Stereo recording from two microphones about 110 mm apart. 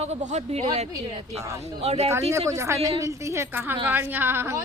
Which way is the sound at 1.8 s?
70° right (ahead or behind).